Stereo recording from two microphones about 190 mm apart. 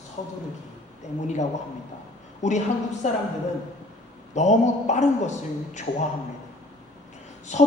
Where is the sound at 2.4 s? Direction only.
35° left (ahead or behind).